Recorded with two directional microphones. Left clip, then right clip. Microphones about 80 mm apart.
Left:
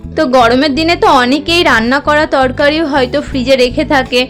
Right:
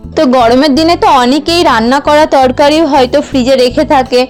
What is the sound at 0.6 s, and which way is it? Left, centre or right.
Speech, right.